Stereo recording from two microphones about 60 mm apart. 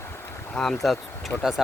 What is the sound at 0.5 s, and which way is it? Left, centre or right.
Speech, centre.